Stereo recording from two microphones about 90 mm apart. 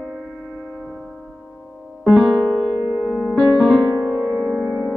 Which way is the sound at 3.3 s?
Centre (ahead or behind).